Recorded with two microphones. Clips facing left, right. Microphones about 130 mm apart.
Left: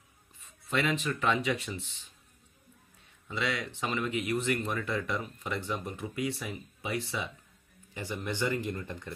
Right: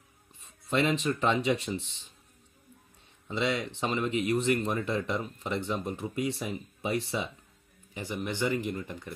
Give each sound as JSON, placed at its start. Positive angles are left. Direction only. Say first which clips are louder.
{"t": 0.4, "sound": "a sound", "louder": "right 3 dB", "side_deg": -30}
{"t": 1.0, "sound": "speech", "louder": "right 3 dB", "side_deg": -30}
{"t": 3.3, "sound": "speech", "louder": "right 4 dB", "side_deg": -25}
{"t": 7.9, "sound": "speech", "louder": "right 2 dB", "side_deg": -15}